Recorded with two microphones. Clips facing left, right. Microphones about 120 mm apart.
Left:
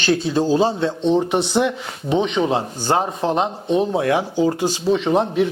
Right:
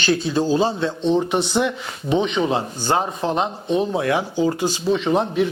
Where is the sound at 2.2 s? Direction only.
50° left (ahead or behind).